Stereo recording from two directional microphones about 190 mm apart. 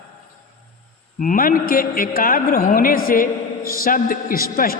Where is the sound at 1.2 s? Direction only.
45° left (ahead or behind).